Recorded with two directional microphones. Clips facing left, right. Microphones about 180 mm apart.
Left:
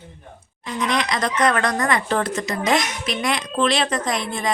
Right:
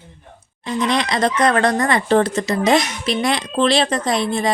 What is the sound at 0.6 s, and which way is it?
A woman's voice, 30° right (ahead or behind).